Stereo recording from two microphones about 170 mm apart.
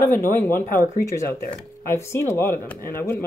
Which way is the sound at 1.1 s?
15° left (ahead or behind).